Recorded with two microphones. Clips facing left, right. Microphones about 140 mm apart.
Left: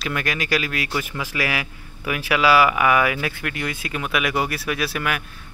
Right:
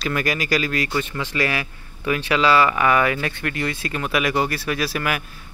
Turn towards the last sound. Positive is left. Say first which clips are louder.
# right 1 dB
turn(degrees=0)  # may be behind; listen again after turning